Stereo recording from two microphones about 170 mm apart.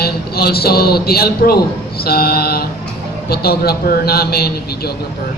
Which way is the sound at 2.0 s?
65° left (ahead or behind).